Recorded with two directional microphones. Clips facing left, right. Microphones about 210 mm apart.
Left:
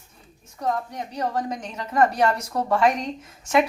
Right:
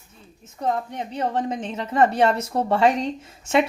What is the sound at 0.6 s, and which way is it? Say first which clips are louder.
A woman's voice: right 2 dB; 25° right (ahead or behind).